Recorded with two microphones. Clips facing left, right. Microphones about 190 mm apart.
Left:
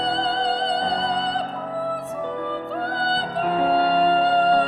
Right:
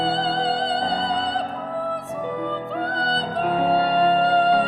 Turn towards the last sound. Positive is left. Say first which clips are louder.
# even
turn(degrees=0)  # may be behind; listen again after turning